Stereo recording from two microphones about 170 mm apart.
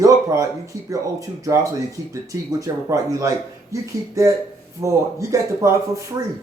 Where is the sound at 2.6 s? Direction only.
20° right (ahead or behind).